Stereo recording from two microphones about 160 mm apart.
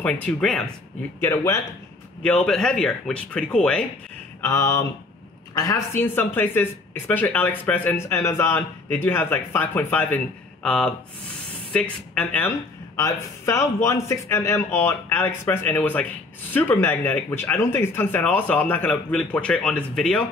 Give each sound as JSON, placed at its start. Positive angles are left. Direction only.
{"t": 0.0, "sound": "speech", "side_deg": 5}
{"t": 1.2, "sound": "speech", "side_deg": 15}
{"t": 2.2, "sound": "speech", "side_deg": 5}
{"t": 4.4, "sound": "a sound", "side_deg": 20}
{"t": 5.5, "sound": "speech", "side_deg": 20}